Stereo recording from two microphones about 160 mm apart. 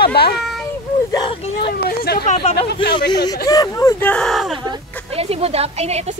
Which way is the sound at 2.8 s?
25° left (ahead or behind).